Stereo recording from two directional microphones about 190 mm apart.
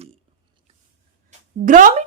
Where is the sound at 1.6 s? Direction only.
45° right (ahead or behind).